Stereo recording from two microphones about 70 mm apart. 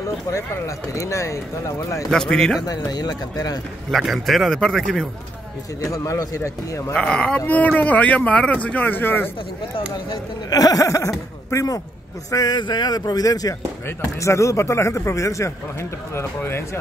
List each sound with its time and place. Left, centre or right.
0.7 s speech: left
2.0 s speech: centre
2.6 s a sound: left
3.9 s speech: centre
5.8 s speech: left
6.9 s speech: centre
10.5 s speech: left
12.3 s a sound: left
13.8 s speech: left
16.3 s speech: left